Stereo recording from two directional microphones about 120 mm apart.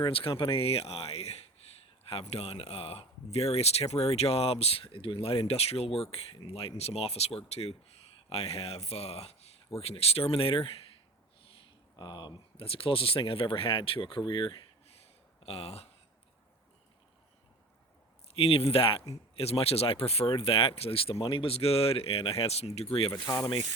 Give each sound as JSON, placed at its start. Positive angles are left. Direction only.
{"t": 0.1, "sound": "speech", "side_deg": 50}
{"t": 11.9, "sound": "speech", "side_deg": 35}
{"t": 12.6, "sound": "speech", "side_deg": 50}
{"t": 15.4, "sound": "speech", "side_deg": 55}
{"t": 18.3, "sound": "speech", "side_deg": 55}
{"t": 23.2, "sound": "speech", "side_deg": 30}